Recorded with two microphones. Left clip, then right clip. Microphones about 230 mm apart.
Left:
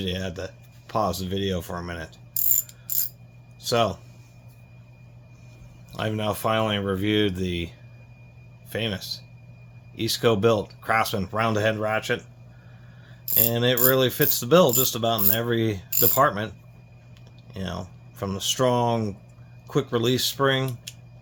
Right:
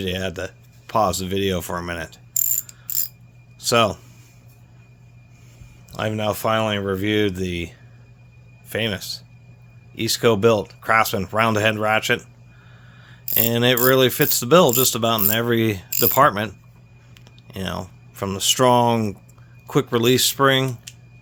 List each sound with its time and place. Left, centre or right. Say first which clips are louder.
0.0 s speech: right 5 dB; right
3.6 s speech: right 5 dB; right
5.9 s speech: right 4 dB; right